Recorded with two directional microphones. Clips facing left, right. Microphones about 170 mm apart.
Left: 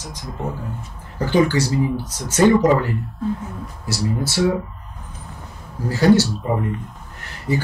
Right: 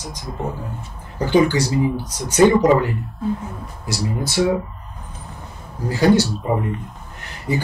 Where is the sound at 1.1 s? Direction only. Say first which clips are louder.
Right 1 dB; 15° right (ahead or behind).